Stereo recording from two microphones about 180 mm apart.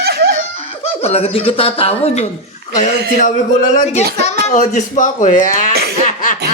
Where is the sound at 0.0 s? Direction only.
60° right (ahead or behind).